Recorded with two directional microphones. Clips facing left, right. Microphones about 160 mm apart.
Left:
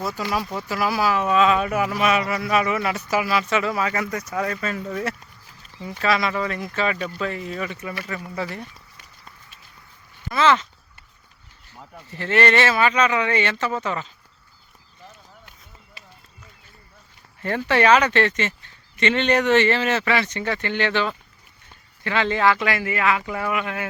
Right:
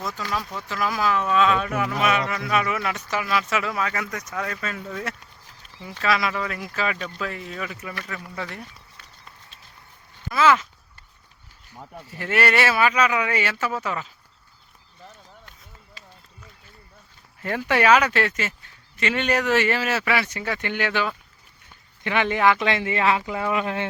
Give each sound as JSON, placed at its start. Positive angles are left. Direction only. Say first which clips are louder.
{"t": 0.0, "sound": "speech", "louder": "left 4 dB", "side_deg": 10}
{"t": 10.3, "sound": "speech", "louder": "even", "side_deg": -5}
{"t": 11.7, "sound": "speech", "louder": "right 1 dB", "side_deg": -10}
{"t": 17.4, "sound": "speech", "louder": "left 2 dB", "side_deg": -10}